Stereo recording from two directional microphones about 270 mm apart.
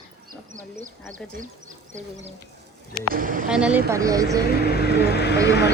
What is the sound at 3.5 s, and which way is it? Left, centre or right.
Speech, centre.